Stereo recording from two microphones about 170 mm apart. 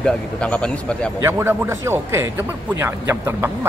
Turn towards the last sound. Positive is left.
turn(degrees=-15)  # may be behind; listen again after turning